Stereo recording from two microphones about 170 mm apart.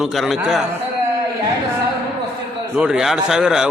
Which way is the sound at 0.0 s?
Centre (ahead or behind).